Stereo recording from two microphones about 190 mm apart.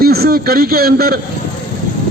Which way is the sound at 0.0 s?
55° right (ahead or behind).